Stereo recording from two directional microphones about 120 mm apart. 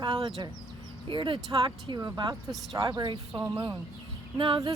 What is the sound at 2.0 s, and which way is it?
Speech, 30° right (ahead or behind).